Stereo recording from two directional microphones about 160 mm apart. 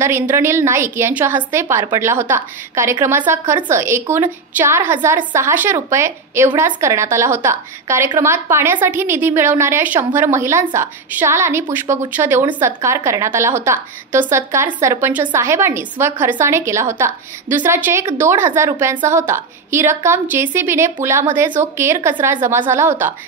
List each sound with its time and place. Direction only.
0.0 s a woman's voice: 15° right (ahead or behind)